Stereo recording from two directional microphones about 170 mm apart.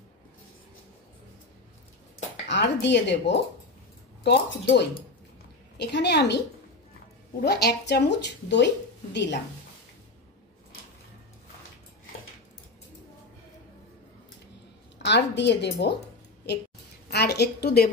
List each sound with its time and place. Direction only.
2.4 s a woman's voice: 90° left
4.2 s speech: 80° left
7.4 s a woman's voice: 75° left (ahead or behind)
8.5 s speech: 90° left
15.0 s a woman's voice: 90° left
17.1 s a woman's voice: 75° left (ahead or behind)